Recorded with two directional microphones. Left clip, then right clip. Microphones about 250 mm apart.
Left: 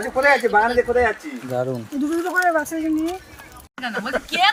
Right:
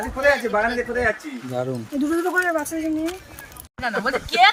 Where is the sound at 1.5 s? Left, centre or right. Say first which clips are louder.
Left 2 dB; centre.